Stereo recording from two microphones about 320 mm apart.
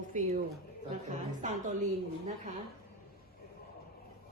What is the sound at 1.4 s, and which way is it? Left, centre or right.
Speech, right.